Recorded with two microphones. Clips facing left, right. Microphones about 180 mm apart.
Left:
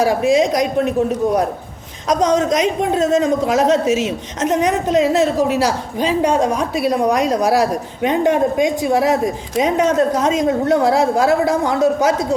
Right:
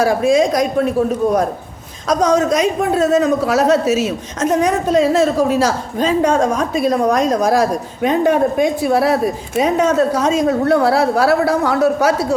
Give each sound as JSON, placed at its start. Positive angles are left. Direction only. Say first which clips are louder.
{"t": 0.0, "sound": "a woman's voice", "louder": "right 1 dB", "side_deg": 15}
{"t": 2.0, "sound": "a woman's voice", "louder": "right 1 dB", "side_deg": 20}